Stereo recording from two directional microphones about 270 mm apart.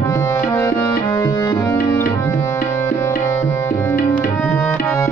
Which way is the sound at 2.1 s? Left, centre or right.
Centre.